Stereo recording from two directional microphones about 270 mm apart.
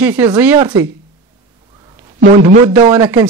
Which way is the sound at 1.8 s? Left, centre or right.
Centre.